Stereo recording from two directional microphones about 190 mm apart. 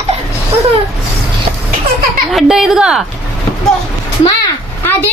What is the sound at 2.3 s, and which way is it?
Speech, centre (ahead or behind).